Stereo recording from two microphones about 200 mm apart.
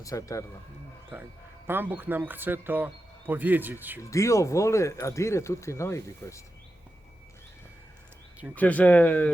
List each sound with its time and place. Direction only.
0.0 s speech: 15° left (ahead or behind)
1.6 s speech: 10° right (ahead or behind)
4.1 s speech: 15° left (ahead or behind)
8.5 s speech: 10° left (ahead or behind)